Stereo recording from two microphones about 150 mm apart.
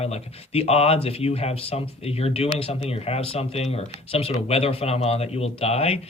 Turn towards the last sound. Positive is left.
turn(degrees=45)  # may be behind; listen again after turning